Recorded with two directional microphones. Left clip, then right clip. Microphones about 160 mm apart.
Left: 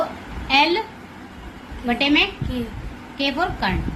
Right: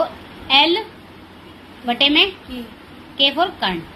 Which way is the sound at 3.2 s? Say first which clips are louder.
Right 5 dB; 15° right (ahead or behind).